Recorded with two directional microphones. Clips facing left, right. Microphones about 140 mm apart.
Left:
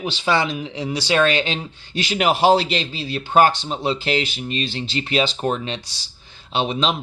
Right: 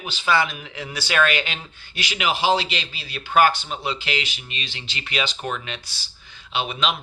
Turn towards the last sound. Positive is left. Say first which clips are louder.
# left 4 dB
turn(degrees=30)  # may be behind; listen again after turning